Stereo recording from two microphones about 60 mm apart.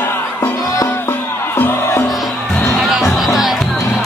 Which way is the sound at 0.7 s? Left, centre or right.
Left.